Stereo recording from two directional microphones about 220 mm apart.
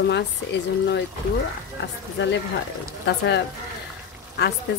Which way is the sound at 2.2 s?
55° left (ahead or behind).